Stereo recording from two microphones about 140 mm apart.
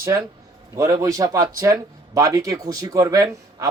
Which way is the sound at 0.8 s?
25° right (ahead or behind).